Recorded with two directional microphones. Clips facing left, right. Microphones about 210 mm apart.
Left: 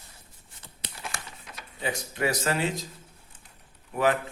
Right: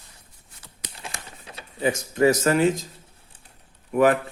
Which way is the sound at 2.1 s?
45° right (ahead or behind).